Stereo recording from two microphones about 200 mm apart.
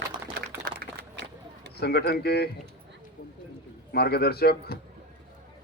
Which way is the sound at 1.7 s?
55° left (ahead or behind).